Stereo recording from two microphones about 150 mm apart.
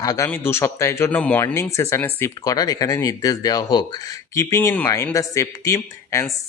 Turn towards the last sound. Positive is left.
turn(degrees=20)  # may be behind; listen again after turning